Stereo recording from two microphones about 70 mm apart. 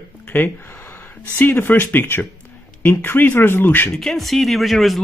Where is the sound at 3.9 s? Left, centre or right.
Centre.